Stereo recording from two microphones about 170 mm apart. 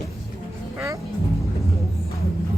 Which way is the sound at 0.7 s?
15° right (ahead or behind).